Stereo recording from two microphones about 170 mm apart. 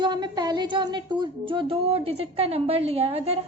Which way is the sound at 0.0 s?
25° right (ahead or behind).